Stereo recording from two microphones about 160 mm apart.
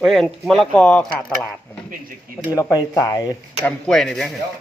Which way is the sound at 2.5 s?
25° left (ahead or behind).